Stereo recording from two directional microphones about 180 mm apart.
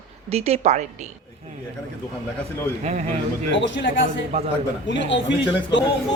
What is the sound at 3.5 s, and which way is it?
A man's voice, 90° left.